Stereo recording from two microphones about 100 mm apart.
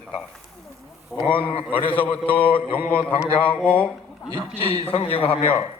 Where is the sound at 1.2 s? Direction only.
60° left (ahead or behind).